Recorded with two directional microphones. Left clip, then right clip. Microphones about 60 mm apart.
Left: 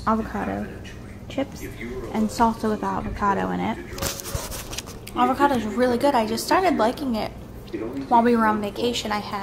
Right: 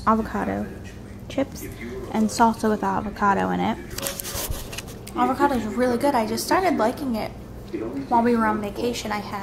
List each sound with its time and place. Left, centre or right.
0.0 s a woman's voice: centre
3.2 s speech: centre
5.1 s a woman's voice: centre